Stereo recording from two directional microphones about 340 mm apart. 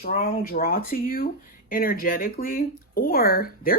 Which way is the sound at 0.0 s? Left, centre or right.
Left.